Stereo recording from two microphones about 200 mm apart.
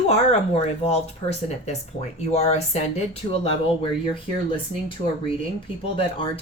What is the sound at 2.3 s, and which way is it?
Speech, 35° left (ahead or behind).